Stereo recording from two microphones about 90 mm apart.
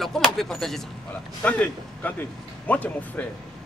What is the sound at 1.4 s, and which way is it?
Speech, 15° left (ahead or behind).